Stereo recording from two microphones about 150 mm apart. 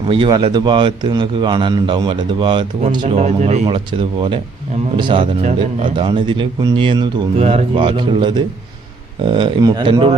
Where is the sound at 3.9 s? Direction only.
35° right (ahead or behind).